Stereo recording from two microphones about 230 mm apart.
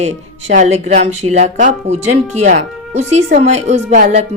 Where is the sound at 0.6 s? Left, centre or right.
Right.